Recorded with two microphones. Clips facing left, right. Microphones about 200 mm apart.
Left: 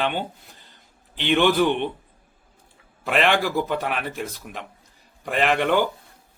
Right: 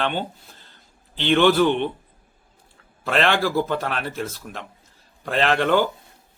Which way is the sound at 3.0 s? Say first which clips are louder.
Even; 15° left (ahead or behind).